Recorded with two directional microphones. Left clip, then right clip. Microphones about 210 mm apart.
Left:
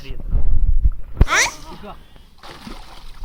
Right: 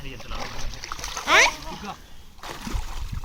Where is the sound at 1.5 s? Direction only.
5° right (ahead or behind).